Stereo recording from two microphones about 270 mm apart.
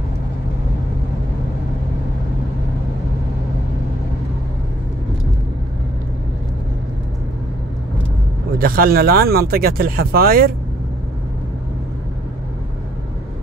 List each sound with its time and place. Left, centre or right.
8.5 s speech: right